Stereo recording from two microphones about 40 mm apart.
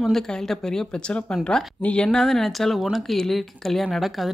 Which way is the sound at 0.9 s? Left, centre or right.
Left.